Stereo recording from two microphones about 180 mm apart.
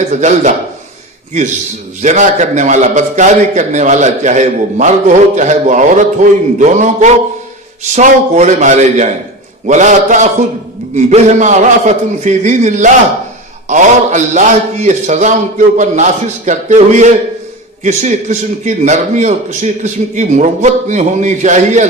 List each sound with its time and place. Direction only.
0.1 s a man's voice: 40° right (ahead or behind)
2.0 s a man's voice: 40° right (ahead or behind)